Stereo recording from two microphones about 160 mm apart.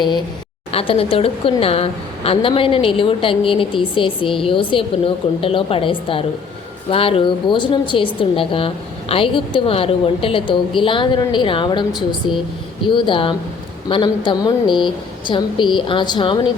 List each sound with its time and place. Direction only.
0.7 s a woman's voice: 35° left (ahead or behind)